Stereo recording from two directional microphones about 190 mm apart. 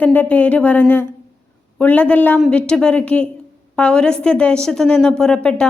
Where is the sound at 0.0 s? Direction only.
10° left (ahead or behind).